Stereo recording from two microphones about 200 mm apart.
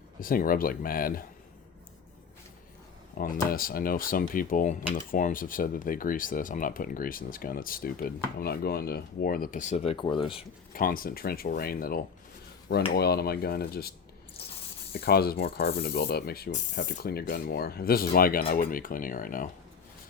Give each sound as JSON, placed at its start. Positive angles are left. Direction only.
{"t": 0.2, "sound": "speech", "side_deg": 45}
{"t": 3.2, "sound": "speech", "side_deg": 45}
{"t": 10.8, "sound": "speech", "side_deg": 45}
{"t": 14.9, "sound": "speech", "side_deg": 50}